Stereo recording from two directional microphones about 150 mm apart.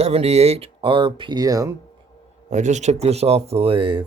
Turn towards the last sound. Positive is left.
turn(degrees=-35)  # may be behind; listen again after turning